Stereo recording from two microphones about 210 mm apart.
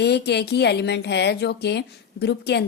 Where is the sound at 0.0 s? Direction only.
50° left (ahead or behind).